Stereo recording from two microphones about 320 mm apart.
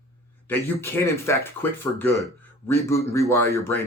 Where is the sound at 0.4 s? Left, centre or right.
Centre.